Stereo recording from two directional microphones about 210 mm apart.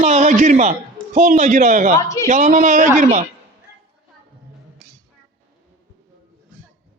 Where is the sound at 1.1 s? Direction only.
35° right (ahead or behind).